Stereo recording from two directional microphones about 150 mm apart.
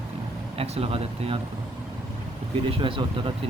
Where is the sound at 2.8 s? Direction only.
35° right (ahead or behind).